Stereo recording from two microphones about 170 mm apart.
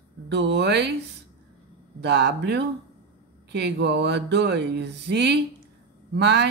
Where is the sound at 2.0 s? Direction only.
80° right.